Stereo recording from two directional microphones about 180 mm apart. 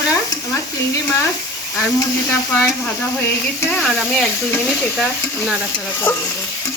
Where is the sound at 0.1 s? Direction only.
15° left (ahead or behind).